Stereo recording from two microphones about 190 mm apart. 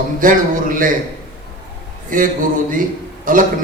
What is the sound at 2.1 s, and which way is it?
A man's voice, 45° right (ahead or behind).